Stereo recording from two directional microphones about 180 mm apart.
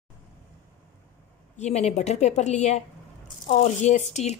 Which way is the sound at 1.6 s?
35° left (ahead or behind).